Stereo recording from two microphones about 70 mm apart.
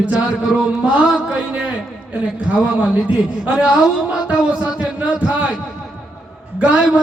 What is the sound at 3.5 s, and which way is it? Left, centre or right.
A man's voice, centre.